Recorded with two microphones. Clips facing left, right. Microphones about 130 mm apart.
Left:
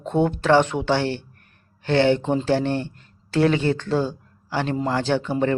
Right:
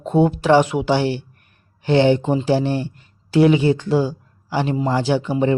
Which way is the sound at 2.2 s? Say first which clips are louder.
Right 3 dB; 5° right (ahead or behind).